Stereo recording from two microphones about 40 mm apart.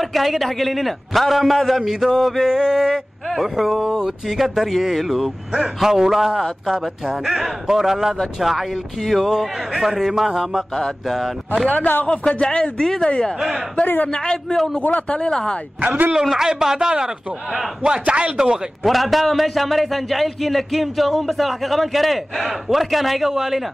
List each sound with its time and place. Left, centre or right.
0.0 s a man's voice: centre
3.3 s a man's voice: centre
12.3 s a man's voice: left
12.7 s speech: centre
13.0 s a man's voice: centre
13.4 s speech: centre
14.0 s a man's voice: left
14.8 s speech: left
15.1 s a man's voice: centre
16.1 s speech: centre
18.0 s speech: right
18.8 s a man's voice: centre